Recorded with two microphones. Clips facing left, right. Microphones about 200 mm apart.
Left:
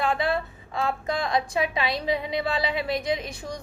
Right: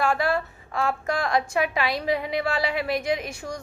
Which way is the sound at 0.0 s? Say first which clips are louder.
Right 1 dB; 20° left (ahead or behind).